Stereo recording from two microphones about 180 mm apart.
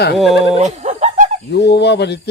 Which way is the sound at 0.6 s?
40° right (ahead or behind).